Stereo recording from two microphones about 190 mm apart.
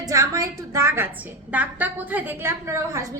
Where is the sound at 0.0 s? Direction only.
15° right (ahead or behind).